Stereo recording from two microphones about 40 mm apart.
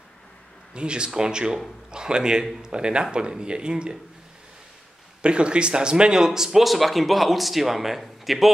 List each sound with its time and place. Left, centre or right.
0.7 s speech: right
5.2 s speech: right; by 8.5 s centre